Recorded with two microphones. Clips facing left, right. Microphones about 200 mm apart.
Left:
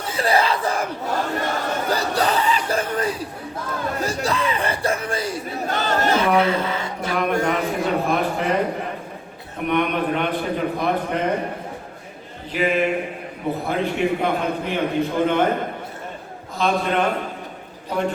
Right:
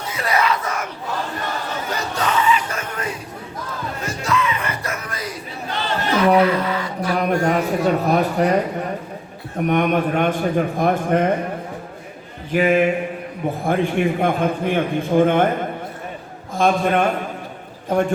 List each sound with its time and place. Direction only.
0.0 s crowd: 30° left (ahead or behind)
1.9 s a sound: 35° left (ahead or behind)
4.0 s music: 35° left (ahead or behind)
5.6 s crowd: 45° left (ahead or behind)
6.1 s a sound: 25° left (ahead or behind)
7.2 s a man's voice: 40° right (ahead or behind)
12.5 s a man's voice: 50° right (ahead or behind)
16.6 s a man's voice: 50° right (ahead or behind)